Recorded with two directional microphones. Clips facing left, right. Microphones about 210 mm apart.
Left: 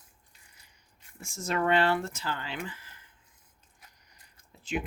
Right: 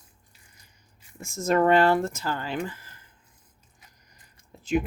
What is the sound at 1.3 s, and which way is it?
Speech, 45° right (ahead or behind).